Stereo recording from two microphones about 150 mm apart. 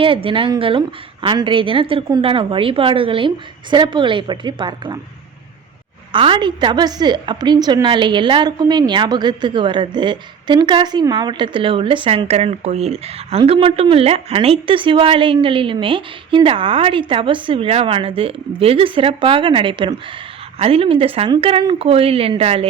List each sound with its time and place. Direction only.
0.0 s a woman's voice: 35° right (ahead or behind)
6.1 s a woman's voice: 35° right (ahead or behind)